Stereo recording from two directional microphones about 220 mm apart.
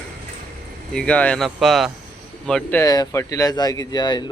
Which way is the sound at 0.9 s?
5° left (ahead or behind).